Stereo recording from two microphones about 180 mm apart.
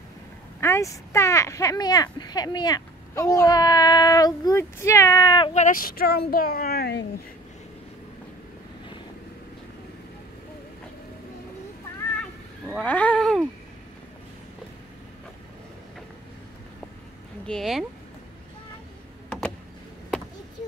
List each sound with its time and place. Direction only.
0.6 s speech: 15° left (ahead or behind)
5.5 s a child's voice: 45° left (ahead or behind); by 7.1 s 65° left (ahead or behind)
12.8 s cat: 10° left (ahead or behind)
17.5 s speech: centre (ahead or behind)